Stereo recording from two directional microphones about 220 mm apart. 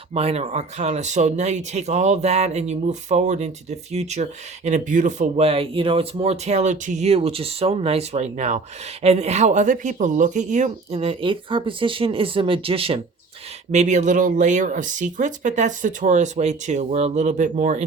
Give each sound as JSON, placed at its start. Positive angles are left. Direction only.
{"t": 0.1, "sound": "speech", "side_deg": -25}